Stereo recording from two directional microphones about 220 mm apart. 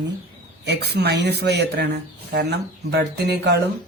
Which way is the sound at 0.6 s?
50° right (ahead or behind).